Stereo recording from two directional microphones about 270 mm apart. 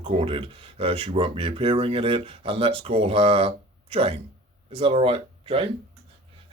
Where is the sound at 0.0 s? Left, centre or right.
Centre.